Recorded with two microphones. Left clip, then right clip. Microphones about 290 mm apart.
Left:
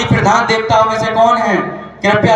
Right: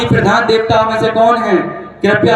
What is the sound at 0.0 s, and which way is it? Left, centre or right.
A man's voice, right.